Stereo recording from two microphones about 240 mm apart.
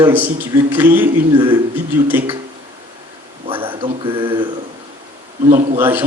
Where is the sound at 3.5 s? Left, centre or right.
Right.